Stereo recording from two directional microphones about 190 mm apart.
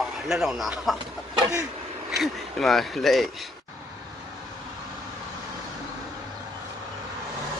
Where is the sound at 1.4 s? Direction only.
15° right (ahead or behind).